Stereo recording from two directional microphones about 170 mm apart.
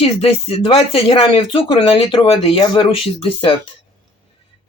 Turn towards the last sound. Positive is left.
turn(degrees=30)  # may be behind; listen again after turning